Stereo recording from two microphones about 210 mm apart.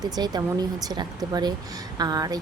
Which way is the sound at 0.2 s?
20° right (ahead or behind).